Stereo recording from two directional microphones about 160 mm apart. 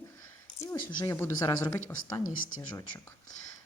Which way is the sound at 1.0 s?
15° left (ahead or behind).